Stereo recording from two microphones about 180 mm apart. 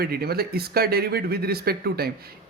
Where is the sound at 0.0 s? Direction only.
60° right (ahead or behind).